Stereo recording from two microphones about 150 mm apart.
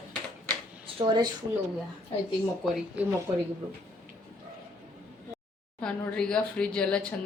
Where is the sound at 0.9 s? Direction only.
35° right (ahead or behind).